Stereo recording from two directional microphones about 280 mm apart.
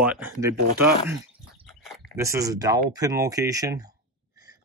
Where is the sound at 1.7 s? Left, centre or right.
Centre.